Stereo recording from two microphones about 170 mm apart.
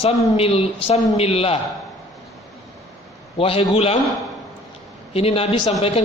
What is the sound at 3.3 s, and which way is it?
Speech, 35° left (ahead or behind).